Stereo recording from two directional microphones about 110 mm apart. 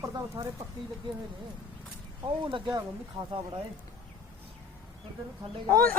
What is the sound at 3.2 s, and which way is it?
Speech, 35° right (ahead or behind).